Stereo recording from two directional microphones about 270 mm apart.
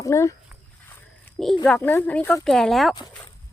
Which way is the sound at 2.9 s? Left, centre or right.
Centre.